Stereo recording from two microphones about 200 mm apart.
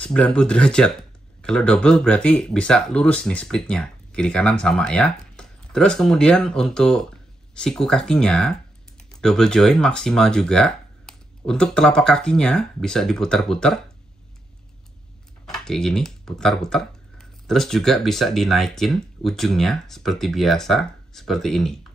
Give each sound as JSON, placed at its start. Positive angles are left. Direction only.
{"t": 0.0, "sound": "speech", "side_deg": 5}
{"t": 15.4, "sound": "speech", "side_deg": 0}